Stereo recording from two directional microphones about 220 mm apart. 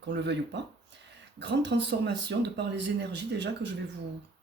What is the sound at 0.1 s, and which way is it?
Speech, 50° right (ahead or behind).